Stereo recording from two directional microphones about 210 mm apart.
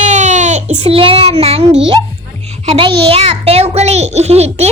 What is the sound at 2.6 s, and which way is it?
A child's voice, 25° right (ahead or behind).